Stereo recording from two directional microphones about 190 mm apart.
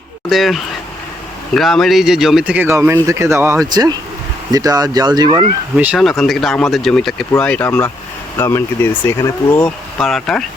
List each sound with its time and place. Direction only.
0.3 s speech: centre (ahead or behind); by 5.5 s 20° right (ahead or behind)
5.7 s speech: 5° right (ahead or behind)